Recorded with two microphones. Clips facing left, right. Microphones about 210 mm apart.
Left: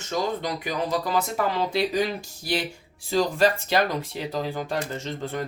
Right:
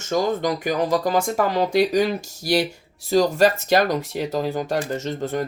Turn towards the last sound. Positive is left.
turn(degrees=-40)  # may be behind; listen again after turning